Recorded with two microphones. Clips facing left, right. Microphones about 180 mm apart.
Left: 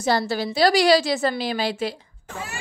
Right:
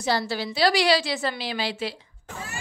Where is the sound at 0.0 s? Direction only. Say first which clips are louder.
Left 4 dB; 45° left (ahead or behind).